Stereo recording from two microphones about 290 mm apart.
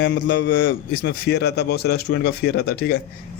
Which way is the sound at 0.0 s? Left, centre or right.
Left.